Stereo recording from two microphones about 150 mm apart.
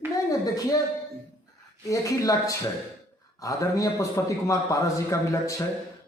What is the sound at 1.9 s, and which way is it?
Speech, 20° left (ahead or behind).